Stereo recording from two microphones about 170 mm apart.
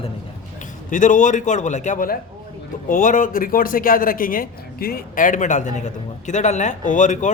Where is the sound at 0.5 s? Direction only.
50° left (ahead or behind).